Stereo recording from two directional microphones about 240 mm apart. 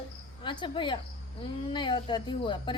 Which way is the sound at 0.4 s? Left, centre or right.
Centre.